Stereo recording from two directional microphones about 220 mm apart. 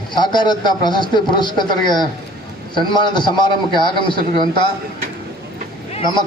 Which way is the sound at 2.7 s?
20° left (ahead or behind).